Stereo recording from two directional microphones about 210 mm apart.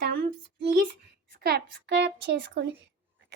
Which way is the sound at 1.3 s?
50° right (ahead or behind).